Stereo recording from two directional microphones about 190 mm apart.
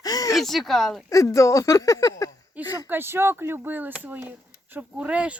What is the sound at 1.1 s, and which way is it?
Speech, 15° left (ahead or behind).